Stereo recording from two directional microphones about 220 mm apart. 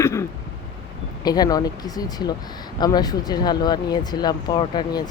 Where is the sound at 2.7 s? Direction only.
20° left (ahead or behind).